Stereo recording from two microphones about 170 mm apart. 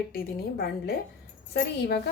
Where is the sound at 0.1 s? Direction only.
60° left (ahead or behind).